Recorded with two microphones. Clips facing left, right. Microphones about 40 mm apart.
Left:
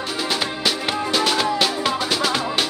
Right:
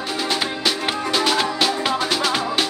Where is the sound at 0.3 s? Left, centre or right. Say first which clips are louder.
Even; centre.